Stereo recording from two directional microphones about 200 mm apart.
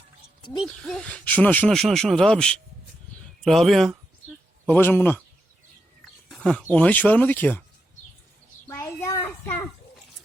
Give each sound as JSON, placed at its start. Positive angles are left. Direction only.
{"t": 0.6, "sound": "speech", "side_deg": 5}
{"t": 6.2, "sound": "speech", "side_deg": 0}
{"t": 8.7, "sound": "a sound", "side_deg": 10}